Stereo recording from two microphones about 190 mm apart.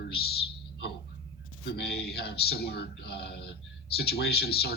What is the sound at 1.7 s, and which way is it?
A man's voice, 60° left (ahead or behind).